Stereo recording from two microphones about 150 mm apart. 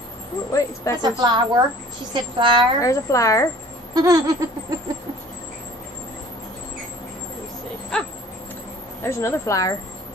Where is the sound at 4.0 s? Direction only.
25° right (ahead or behind).